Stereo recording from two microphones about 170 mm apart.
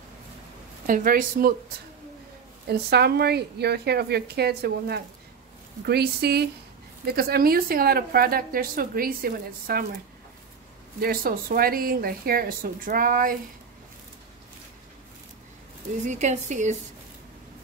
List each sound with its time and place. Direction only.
0.8 s a woman's voice: 55° right (ahead or behind)
2.6 s a woman's voice: 70° right (ahead or behind)
11.0 s a woman's voice: 60° right (ahead or behind)
16.1 s a woman's voice: 45° right (ahead or behind)